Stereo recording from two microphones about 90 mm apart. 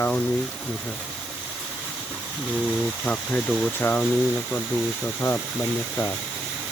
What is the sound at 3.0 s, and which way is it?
Speech, 10° left (ahead or behind).